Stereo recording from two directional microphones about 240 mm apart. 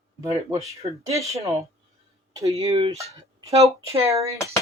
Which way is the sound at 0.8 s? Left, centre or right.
Right.